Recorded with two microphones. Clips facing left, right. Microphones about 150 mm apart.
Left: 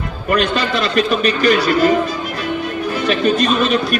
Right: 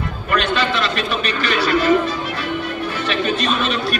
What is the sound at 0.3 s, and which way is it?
A man's voice, 40° left (ahead or behind).